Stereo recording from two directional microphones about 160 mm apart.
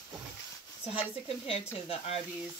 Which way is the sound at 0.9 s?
35° left (ahead or behind).